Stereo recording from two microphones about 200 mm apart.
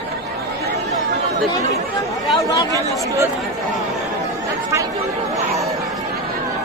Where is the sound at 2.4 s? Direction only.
20° left (ahead or behind).